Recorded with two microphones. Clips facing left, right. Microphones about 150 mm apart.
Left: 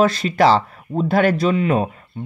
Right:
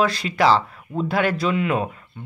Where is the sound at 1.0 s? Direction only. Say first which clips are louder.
Left 5 dB; 45° left (ahead or behind).